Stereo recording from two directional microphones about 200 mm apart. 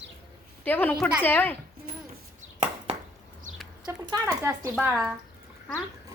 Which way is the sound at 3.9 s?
10° right (ahead or behind).